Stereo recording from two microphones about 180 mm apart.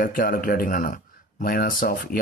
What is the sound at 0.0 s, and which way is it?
Speech, 50° left (ahead or behind).